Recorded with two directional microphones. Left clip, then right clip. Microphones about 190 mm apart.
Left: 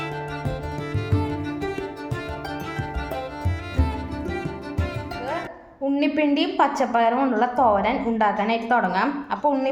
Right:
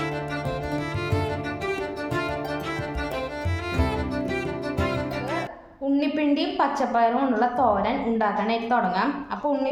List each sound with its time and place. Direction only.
1.1 s music: centre (ahead or behind)
6.0 s a woman's voice: 25° left (ahead or behind)